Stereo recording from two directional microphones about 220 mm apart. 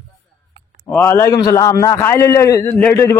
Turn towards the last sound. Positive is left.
turn(degrees=10)  # may be behind; listen again after turning